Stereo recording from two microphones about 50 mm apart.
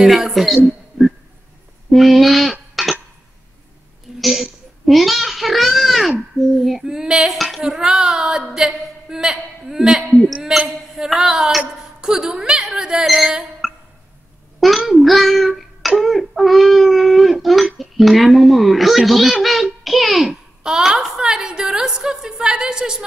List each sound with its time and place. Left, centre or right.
0.0 s speech: centre
1.9 s speech: centre
2.7 s music: centre
4.2 s speech: centre
6.8 s a woman's voice: centre
13.6 s a sound: centre
14.9 s child singing: centre
17.7 s speech: centre
20.6 s a woman's voice: centre